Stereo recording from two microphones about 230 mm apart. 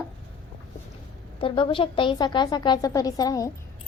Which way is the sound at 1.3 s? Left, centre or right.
Left.